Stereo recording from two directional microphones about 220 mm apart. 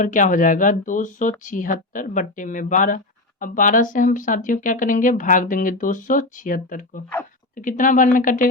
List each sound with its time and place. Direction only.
0.0 s speech: 35° left (ahead or behind)